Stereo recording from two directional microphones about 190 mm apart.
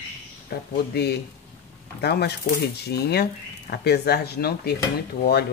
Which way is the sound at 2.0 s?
60° left (ahead or behind).